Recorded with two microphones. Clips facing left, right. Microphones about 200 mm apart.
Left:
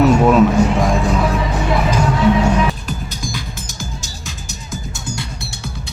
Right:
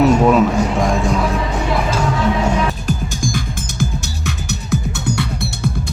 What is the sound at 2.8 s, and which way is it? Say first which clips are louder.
Music: right 5 dB; 45° right (ahead or behind).